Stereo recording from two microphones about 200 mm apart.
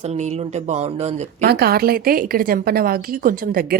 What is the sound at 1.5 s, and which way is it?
A woman's voice, 50° right (ahead or behind).